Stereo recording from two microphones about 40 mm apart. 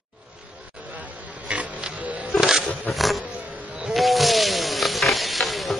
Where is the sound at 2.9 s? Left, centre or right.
Centre.